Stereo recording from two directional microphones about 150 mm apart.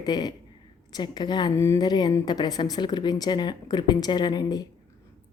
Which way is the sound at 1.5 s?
20° left (ahead or behind).